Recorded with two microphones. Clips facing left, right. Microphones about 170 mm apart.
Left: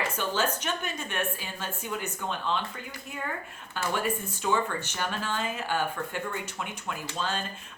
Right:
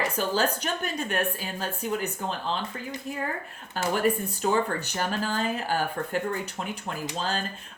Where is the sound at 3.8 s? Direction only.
40° right (ahead or behind).